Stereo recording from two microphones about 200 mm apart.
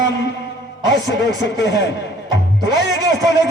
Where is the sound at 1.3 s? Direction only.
60° left (ahead or behind).